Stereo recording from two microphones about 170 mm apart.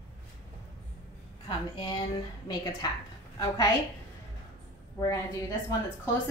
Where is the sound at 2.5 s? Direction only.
25° left (ahead or behind).